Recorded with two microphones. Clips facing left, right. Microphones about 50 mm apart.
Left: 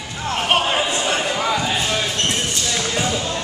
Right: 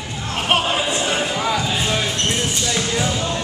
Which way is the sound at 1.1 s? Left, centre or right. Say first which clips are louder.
Even; centre.